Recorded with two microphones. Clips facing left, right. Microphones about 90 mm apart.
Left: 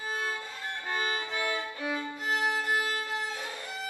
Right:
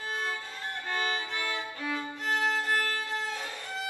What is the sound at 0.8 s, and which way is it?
Violin, 10° left (ahead or behind).